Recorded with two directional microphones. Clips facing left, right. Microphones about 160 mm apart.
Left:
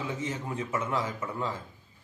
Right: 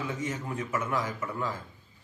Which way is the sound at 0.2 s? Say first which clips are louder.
Even; 25° left (ahead or behind).